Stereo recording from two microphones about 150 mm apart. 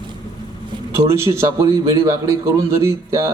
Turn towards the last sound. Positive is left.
turn(degrees=-20)  # may be behind; listen again after turning